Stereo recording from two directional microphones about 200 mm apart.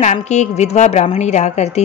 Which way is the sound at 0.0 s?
35° left (ahead or behind).